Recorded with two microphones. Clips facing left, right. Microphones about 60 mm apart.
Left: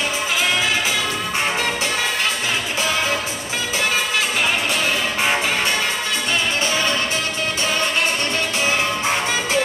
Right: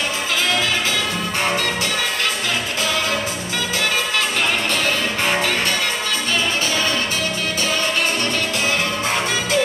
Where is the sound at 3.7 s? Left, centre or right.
Centre.